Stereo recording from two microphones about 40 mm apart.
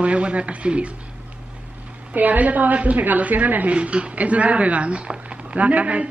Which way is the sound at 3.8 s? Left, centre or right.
Right.